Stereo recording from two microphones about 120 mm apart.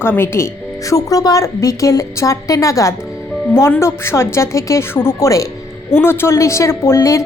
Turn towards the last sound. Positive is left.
turn(degrees=25)  # may be behind; listen again after turning